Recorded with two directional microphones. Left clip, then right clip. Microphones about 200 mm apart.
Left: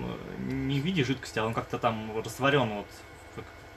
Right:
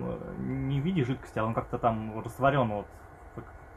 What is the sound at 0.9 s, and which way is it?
Speech, 30° right (ahead or behind).